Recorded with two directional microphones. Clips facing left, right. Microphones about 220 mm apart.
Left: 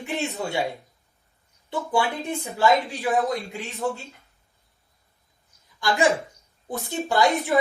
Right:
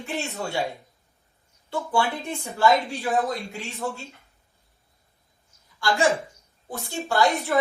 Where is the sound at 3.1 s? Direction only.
15° left (ahead or behind).